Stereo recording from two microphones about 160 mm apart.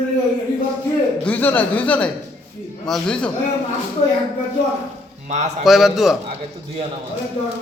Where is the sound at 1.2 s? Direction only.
10° left (ahead or behind).